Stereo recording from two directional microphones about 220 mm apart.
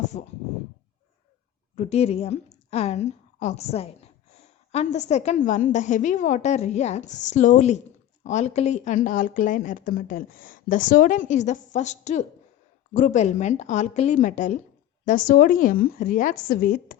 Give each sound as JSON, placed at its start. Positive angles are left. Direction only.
{"t": 0.1, "sound": "speech", "side_deg": 30}
{"t": 1.7, "sound": "a woman's voice", "side_deg": 30}